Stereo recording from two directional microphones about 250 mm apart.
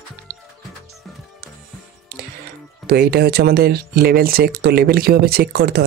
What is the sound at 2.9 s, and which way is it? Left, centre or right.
Speech, right.